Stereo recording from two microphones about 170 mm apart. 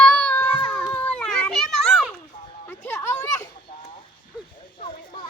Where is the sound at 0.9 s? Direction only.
5° left (ahead or behind).